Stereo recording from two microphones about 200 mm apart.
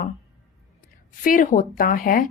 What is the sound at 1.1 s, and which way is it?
A woman's voice, 45° left (ahead or behind).